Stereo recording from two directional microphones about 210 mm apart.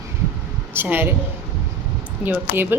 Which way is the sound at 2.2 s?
10° right (ahead or behind).